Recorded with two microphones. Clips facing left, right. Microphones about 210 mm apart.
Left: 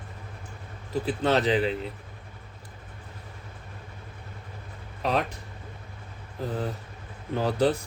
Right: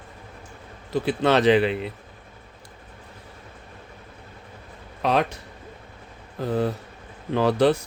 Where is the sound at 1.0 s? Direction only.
75° right (ahead or behind).